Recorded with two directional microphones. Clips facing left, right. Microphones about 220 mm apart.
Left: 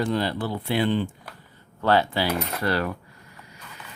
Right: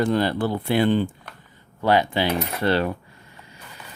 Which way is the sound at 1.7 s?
15° right (ahead or behind).